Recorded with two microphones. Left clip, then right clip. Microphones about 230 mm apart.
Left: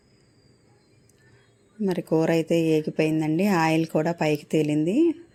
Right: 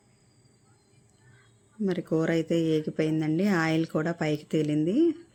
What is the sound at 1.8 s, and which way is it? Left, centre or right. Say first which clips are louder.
Speech: left 4 dB; centre.